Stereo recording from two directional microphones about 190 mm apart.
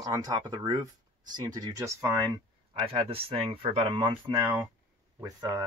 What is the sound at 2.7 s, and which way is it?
Speech, 30° right (ahead or behind).